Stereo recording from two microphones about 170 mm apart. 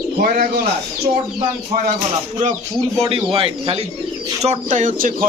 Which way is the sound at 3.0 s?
35° right (ahead or behind).